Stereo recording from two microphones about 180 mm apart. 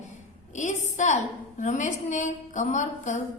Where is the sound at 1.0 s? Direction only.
40° left (ahead or behind).